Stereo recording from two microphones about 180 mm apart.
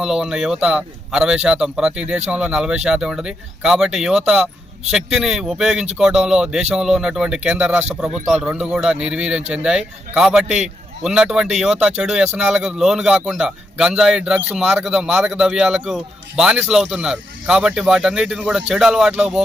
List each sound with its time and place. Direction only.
0.0 s a man's voice: 5° right (ahead or behind)